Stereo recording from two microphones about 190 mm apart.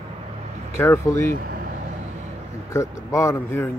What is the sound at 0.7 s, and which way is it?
Speech, 15° left (ahead or behind).